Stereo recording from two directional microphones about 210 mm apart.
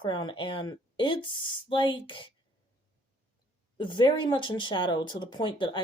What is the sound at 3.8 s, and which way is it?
Speech, 20° left (ahead or behind).